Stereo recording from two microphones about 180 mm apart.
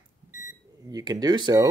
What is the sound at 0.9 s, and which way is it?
Speech, 20° right (ahead or behind).